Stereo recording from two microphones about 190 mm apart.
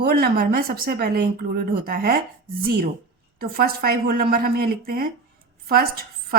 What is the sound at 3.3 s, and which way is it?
A woman's voice, 50° right (ahead or behind).